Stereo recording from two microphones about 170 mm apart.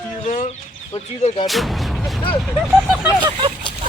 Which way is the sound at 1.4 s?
Centre (ahead or behind).